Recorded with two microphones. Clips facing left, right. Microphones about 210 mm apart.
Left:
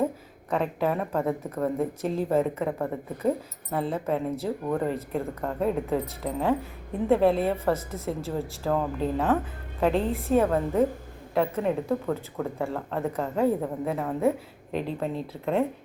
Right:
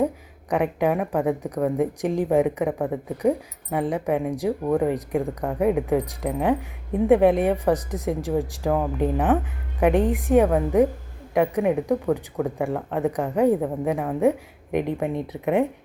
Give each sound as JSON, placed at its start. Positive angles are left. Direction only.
{"t": 0.5, "sound": "a woman's voice", "side_deg": -15}